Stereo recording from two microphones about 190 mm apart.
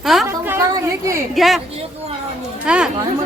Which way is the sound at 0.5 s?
15° right (ahead or behind).